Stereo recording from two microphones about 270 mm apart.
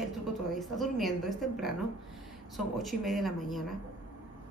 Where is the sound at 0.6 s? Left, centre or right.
Centre.